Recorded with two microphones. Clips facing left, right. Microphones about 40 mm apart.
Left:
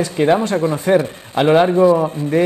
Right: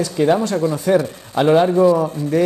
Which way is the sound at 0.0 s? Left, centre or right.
Left.